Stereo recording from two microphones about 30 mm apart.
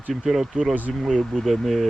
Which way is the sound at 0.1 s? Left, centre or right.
Centre.